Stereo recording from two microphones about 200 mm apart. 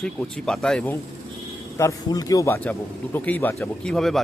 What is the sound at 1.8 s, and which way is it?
Speech, 15° left (ahead or behind).